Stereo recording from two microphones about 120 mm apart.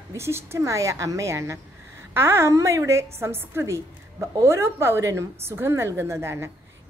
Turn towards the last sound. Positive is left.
turn(degrees=-20)  # may be behind; listen again after turning